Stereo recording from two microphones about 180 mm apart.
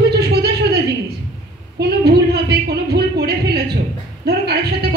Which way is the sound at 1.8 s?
65° right (ahead or behind).